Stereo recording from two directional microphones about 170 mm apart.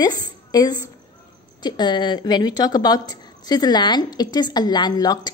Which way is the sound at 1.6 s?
25° left (ahead or behind).